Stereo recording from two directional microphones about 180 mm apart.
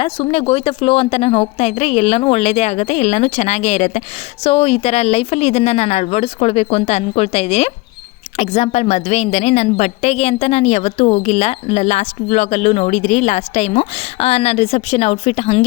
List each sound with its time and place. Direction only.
0.0 s a woman's voice: 30° left (ahead or behind)